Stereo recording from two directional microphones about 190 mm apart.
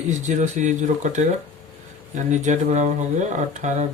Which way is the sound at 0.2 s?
40° right (ahead or behind).